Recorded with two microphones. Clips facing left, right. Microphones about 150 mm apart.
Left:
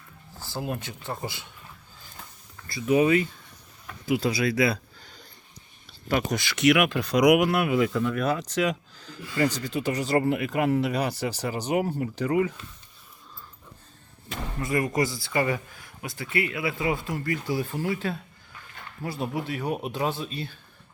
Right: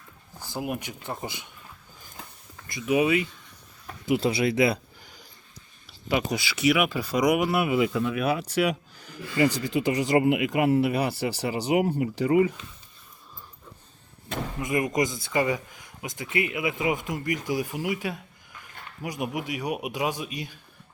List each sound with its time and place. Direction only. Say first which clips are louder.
0.3 s speech: right 1 dB; 15° right (ahead or behind)
2.6 s speech: left 2 dB; 15° right (ahead or behind)
4.0 s speech: right 1 dB; 25° right (ahead or behind)
6.1 s speech: even; 10° right (ahead or behind)
14.6 s speech: even; 20° right (ahead or behind)